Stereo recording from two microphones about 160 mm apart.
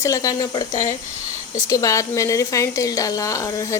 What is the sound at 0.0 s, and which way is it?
A woman's voice, 20° left (ahead or behind).